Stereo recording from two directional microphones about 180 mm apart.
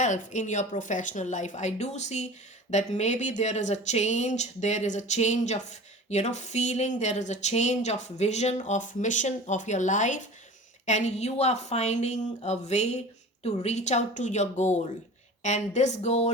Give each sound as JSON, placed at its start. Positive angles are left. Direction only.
{"t": 0.0, "sound": "a woman's voice", "side_deg": 40}